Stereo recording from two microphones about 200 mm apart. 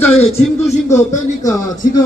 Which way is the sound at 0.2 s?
35° left (ahead or behind).